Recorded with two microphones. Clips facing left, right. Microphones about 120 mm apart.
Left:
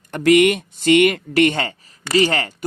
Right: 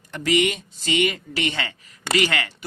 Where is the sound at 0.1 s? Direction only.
55° left (ahead or behind).